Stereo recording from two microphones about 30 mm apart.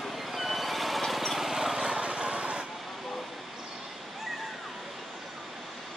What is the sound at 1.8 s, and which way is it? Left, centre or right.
Vehicle, right.